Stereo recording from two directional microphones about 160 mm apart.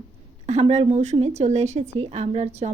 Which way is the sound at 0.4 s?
40° right (ahead or behind).